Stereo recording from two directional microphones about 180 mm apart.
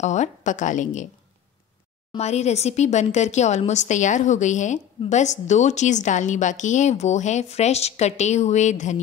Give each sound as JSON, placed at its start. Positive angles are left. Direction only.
{"t": 0.0, "sound": "speech", "side_deg": 40}
{"t": 2.1, "sound": "speech", "side_deg": 40}